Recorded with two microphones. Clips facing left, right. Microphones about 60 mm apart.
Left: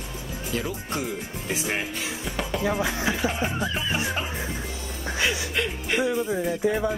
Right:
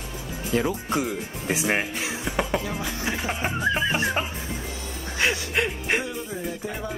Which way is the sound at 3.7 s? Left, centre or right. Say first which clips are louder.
Right 3 dB; right.